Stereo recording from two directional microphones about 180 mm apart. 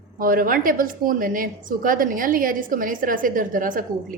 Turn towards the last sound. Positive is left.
turn(degrees=-50)  # may be behind; listen again after turning